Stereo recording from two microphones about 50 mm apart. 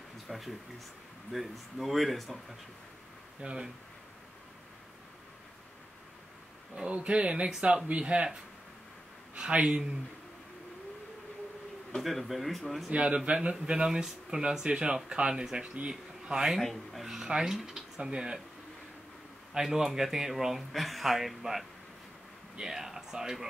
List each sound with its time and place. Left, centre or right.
0.3 s speech: centre
3.3 s speech: centre
6.7 s speech: right
9.4 s speech: centre
12.0 s speech: centre
12.9 s speech: right
19.5 s speech: centre